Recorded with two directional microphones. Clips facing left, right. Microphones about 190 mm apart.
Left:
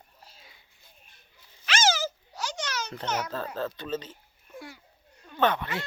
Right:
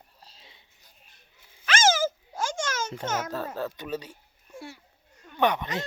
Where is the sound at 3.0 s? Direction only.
45° right (ahead or behind).